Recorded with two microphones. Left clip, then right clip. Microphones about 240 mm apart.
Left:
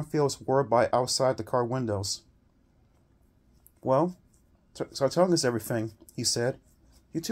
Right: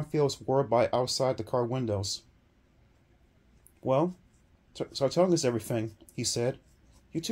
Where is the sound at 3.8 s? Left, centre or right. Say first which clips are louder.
Left 2 dB; left.